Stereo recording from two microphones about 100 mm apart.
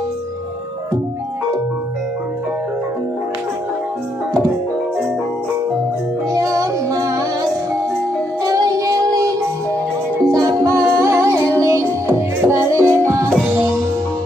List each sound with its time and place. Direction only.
6.3 s music: 35° right (ahead or behind)
8.5 s music: 35° right (ahead or behind)
10.3 s music: 40° right (ahead or behind)